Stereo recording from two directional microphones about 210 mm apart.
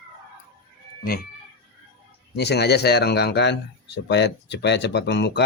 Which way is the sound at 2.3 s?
50° left (ahead or behind).